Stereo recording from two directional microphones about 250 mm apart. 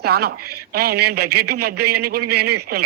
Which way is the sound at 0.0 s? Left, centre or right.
Right.